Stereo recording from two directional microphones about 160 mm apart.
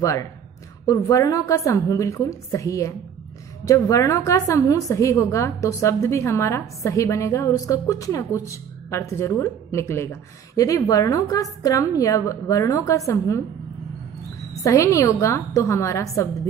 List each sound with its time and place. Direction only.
0.0 s a woman's voice: 20° left (ahead or behind)
14.6 s a woman's voice: 20° left (ahead or behind)